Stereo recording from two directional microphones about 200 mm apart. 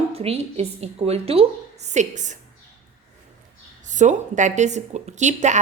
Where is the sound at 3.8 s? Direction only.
40° right (ahead or behind).